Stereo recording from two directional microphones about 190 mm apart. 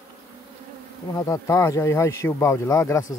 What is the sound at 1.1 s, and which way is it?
Speech, 15° left (ahead or behind).